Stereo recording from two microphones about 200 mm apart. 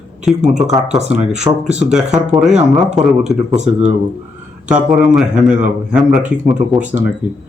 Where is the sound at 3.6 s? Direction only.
35° right (ahead or behind).